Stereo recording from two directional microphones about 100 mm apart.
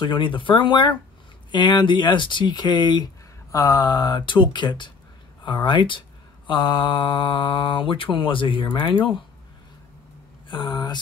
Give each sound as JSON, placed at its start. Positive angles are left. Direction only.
{"t": 0.0, "sound": "speech", "side_deg": 55}
{"t": 10.5, "sound": "speech", "side_deg": 45}